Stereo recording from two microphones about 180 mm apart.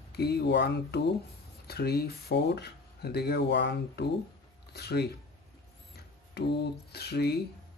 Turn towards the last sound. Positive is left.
turn(degrees=65)  # may be behind; listen again after turning